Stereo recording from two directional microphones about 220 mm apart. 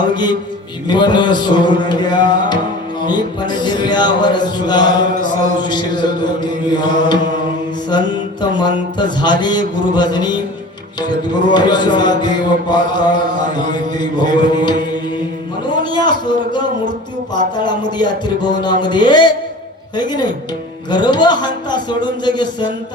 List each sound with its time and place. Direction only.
0.1 s chant: 20° left (ahead or behind)
11.4 s chant: 20° left (ahead or behind)
15.7 s speech: 20° left (ahead or behind)
17.3 s chant: 20° left (ahead or behind)